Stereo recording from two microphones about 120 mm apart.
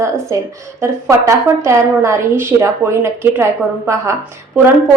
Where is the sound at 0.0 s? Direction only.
25° right (ahead or behind).